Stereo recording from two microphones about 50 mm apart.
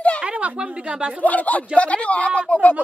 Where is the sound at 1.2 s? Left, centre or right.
Left.